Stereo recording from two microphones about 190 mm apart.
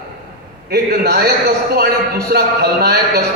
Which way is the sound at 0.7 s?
55° right (ahead or behind).